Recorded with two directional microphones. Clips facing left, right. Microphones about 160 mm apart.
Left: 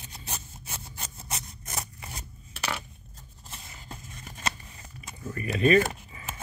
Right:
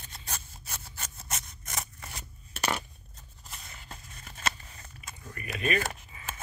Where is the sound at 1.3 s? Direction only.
35° left (ahead or behind).